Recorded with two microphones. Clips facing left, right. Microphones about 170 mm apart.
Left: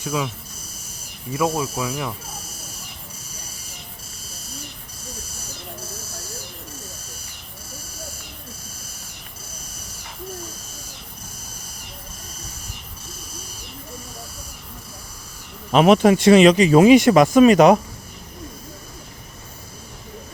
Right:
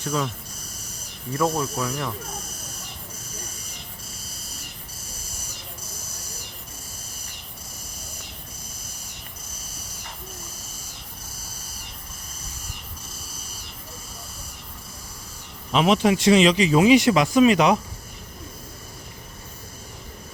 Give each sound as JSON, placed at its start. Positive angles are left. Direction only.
{"t": 0.0, "sound": "speech", "side_deg": 10}
{"t": 1.3, "sound": "speech", "side_deg": 5}
{"t": 15.7, "sound": "speech", "side_deg": 50}